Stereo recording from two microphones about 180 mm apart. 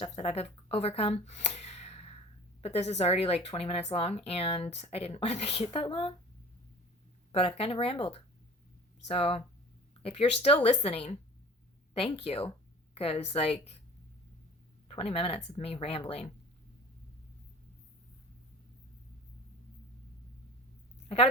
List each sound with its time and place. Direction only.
0.0 s speech: 35° left (ahead or behind)
7.3 s speech: 30° left (ahead or behind)
14.8 s speech: 30° left (ahead or behind)